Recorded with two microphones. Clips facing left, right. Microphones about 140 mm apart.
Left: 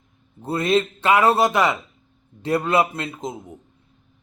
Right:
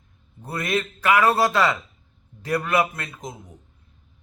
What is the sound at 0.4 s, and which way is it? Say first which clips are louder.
Speech: left 6 dB; 25° left (ahead or behind).